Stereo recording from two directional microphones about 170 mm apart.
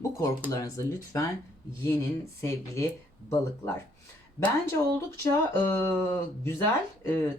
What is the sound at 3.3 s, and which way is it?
Speech, 15° left (ahead or behind).